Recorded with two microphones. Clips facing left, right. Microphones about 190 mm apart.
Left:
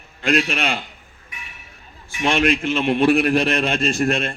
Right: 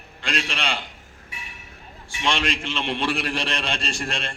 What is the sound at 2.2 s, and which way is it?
A man's voice, 50° left (ahead or behind).